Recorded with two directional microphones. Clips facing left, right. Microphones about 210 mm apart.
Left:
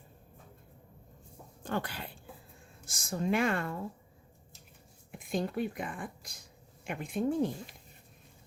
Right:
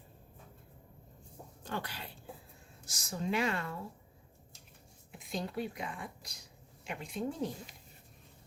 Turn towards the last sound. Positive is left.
turn(degrees=55)  # may be behind; listen again after turning